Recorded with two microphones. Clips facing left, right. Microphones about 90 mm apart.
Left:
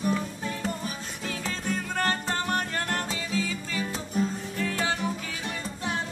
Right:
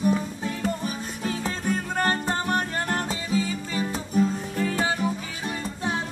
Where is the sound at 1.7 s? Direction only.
35° right (ahead or behind).